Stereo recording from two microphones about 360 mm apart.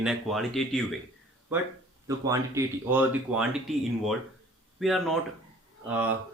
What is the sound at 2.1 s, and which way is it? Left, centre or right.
A man's voice, centre.